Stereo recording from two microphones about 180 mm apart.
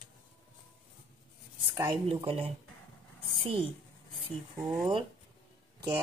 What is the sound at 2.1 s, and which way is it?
Speech, 30° right (ahead or behind).